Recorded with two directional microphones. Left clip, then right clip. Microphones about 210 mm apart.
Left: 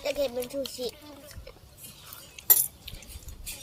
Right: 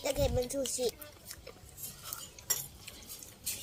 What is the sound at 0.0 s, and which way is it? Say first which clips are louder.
Speech: left 3 dB; 30° right (ahead or behind).